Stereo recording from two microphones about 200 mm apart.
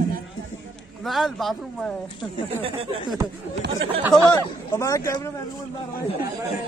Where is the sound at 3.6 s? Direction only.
55° right (ahead or behind).